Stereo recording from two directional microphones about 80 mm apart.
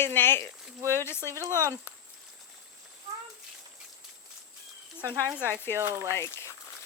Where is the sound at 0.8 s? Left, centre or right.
Right.